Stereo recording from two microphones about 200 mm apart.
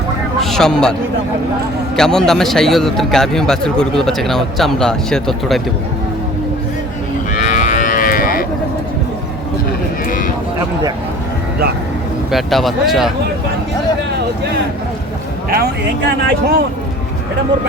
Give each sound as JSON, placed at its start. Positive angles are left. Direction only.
{"t": 0.3, "sound": "a man's voice", "side_deg": 0}
{"t": 2.0, "sound": "a man's voice", "side_deg": 5}
{"t": 7.4, "sound": "moo", "side_deg": 40}
{"t": 12.3, "sound": "a man's voice", "side_deg": 0}
{"t": 15.4, "sound": "speech", "side_deg": -50}